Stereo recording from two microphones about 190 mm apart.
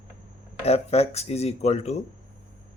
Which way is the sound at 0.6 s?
35° left (ahead or behind).